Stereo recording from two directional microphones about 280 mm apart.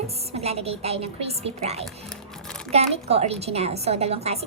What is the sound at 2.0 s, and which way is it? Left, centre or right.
Music, centre.